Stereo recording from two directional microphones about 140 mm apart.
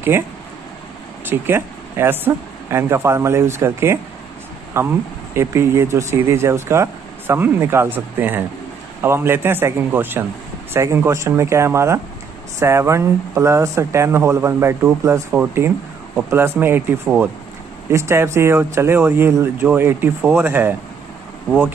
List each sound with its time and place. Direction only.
0.1 s speech: 15° right (ahead or behind)